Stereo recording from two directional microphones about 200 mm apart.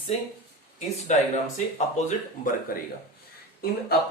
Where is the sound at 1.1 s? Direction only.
35° left (ahead or behind).